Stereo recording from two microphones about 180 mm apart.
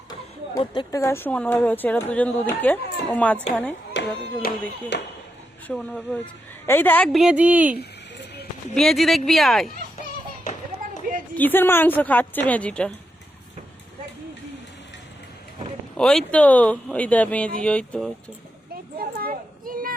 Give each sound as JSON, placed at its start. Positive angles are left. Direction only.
{"t": 0.1, "sound": "speech", "side_deg": 25}
{"t": 4.9, "sound": "speech", "side_deg": 75}
{"t": 5.6, "sound": "a woman's voice", "side_deg": 10}
{"t": 11.3, "sound": "speech", "side_deg": 10}
{"t": 16.0, "sound": "speech", "side_deg": 5}
{"t": 18.9, "sound": "children playing", "side_deg": -50}